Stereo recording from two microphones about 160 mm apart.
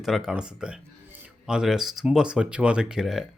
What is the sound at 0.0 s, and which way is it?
Speech, centre (ahead or behind).